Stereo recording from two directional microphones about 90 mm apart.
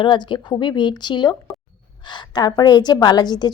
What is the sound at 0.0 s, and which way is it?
A woman's voice, 65° left (ahead or behind).